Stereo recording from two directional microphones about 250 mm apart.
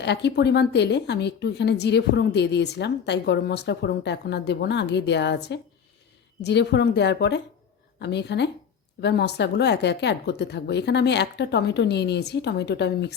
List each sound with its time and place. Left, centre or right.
0.0 s a woman's voice: left